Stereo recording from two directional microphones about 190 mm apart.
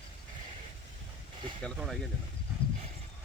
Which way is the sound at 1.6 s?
Centre (ahead or behind).